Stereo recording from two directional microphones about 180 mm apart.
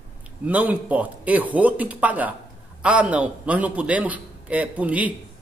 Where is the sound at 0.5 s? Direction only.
10° right (ahead or behind).